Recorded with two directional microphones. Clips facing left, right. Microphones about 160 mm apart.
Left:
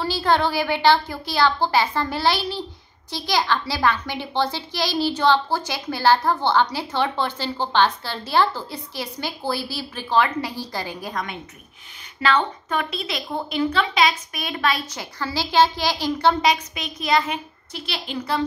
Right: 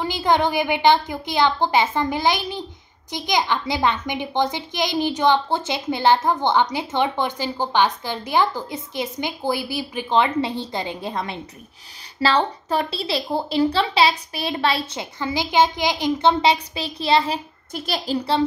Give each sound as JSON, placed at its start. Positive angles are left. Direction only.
{"t": 0.0, "sound": "a child's voice", "side_deg": -20}
{"t": 17.7, "sound": "a woman's voice", "side_deg": -45}